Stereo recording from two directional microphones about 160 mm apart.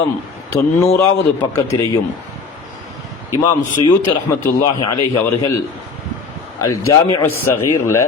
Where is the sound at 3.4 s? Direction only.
30° left (ahead or behind).